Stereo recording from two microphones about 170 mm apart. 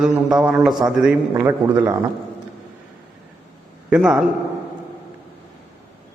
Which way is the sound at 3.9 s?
5° right (ahead or behind).